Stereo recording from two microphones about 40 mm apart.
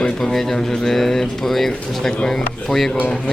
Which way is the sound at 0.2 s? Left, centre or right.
Centre.